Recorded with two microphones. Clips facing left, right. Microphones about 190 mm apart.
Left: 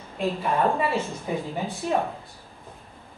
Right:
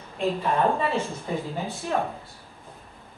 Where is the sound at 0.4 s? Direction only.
10° left (ahead or behind).